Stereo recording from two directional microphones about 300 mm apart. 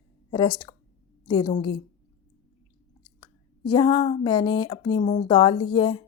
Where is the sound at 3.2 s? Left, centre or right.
Centre.